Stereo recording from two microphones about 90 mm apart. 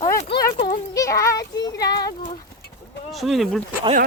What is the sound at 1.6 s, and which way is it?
Speech, 45° left (ahead or behind).